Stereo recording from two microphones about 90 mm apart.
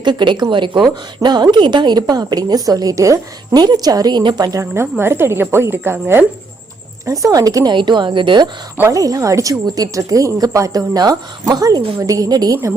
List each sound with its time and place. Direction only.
0.0 s a woman's voice: 55° right (ahead or behind); by 3.6 s 35° right (ahead or behind)
3.6 s speech: 50° right (ahead or behind)
4.4 s a woman's voice: 35° right (ahead or behind)
7.0 s a woman's voice: 40° right (ahead or behind)
7.8 s a woman's voice: 60° right (ahead or behind)
8.9 s speech: 40° right (ahead or behind)